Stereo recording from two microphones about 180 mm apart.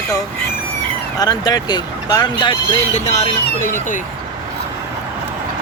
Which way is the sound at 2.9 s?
40° left (ahead or behind).